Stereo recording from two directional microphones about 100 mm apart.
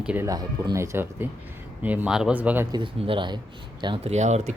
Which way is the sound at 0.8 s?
20° right (ahead or behind).